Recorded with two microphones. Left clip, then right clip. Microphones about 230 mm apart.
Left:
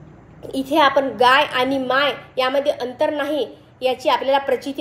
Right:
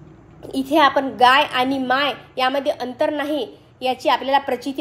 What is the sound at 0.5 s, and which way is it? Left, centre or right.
A woman's voice, centre.